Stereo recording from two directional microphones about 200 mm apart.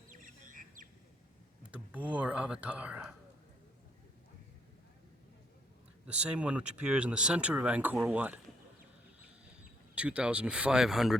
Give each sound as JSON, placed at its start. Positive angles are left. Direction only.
{"t": 0.1, "sound": "bird", "side_deg": -40}
{"t": 1.7, "sound": "speech", "side_deg": -5}
{"t": 6.1, "sound": "speech", "side_deg": -5}
{"t": 9.9, "sound": "speech", "side_deg": -5}